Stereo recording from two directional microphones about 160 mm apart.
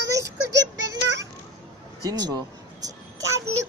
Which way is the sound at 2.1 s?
25° right (ahead or behind).